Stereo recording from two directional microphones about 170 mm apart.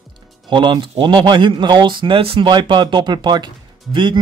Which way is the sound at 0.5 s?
30° right (ahead or behind).